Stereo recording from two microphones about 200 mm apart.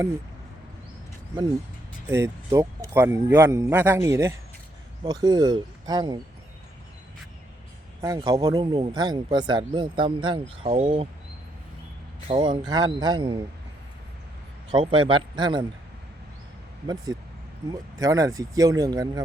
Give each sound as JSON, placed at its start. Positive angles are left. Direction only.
{"t": 2.0, "sound": "a man's voice", "side_deg": -15}
{"t": 8.0, "sound": "speech", "side_deg": -20}
{"t": 12.3, "sound": "speech", "side_deg": -25}
{"t": 14.7, "sound": "speech", "side_deg": -25}
{"t": 16.8, "sound": "a man's voice", "side_deg": -20}